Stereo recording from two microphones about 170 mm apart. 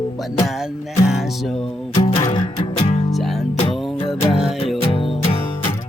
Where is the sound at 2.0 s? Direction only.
30° left (ahead or behind).